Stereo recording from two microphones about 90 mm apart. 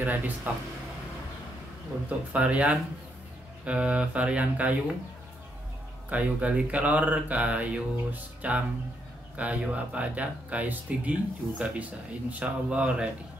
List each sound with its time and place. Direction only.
0.0 s speech: 20° right (ahead or behind)
2.0 s speech: 15° right (ahead or behind)
6.0 s speech: 15° right (ahead or behind)